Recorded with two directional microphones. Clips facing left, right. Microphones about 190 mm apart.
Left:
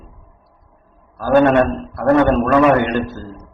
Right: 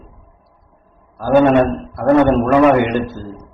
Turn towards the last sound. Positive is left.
turn(degrees=-15)  # may be behind; listen again after turning